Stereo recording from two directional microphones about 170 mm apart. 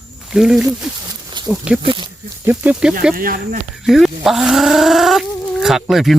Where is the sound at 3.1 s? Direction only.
55° right (ahead or behind).